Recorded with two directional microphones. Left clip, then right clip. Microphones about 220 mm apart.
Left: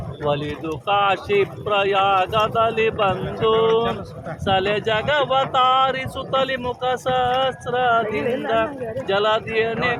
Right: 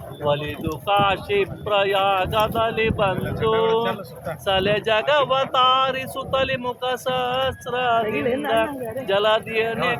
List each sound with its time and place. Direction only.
0.3 s speech: centre (ahead or behind)
3.5 s speech: 30° right (ahead or behind)
4.4 s speech: 15° right (ahead or behind)